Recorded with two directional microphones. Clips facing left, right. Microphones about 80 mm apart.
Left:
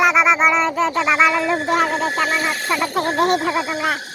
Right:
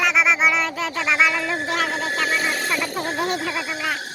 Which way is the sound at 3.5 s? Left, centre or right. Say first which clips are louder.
Left 6 dB; left.